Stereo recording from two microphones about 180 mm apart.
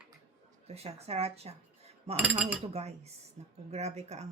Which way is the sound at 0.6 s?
35° right (ahead or behind).